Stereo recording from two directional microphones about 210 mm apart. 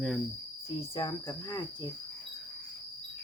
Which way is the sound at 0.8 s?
20° left (ahead or behind).